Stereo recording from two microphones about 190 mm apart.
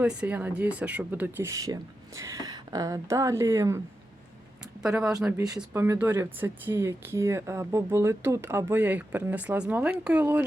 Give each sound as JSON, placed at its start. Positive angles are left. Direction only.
{"t": 0.0, "sound": "speech", "side_deg": -5}
{"t": 4.8, "sound": "speech", "side_deg": -5}